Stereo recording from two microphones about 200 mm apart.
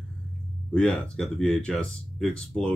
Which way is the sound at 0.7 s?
5° left (ahead or behind).